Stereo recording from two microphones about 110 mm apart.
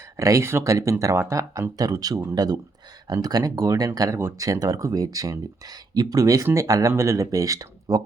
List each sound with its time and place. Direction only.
0.2 s speech: 30° right (ahead or behind)
4.2 s speech: 20° right (ahead or behind)
4.4 s speech: 30° right (ahead or behind)